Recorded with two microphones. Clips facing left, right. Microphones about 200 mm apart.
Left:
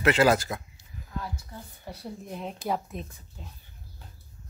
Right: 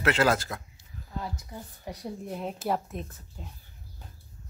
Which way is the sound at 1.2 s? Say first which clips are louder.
Right 1 dB; 15° right (ahead or behind).